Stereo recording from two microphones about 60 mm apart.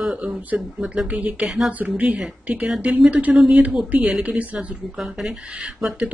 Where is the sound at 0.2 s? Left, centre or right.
Right.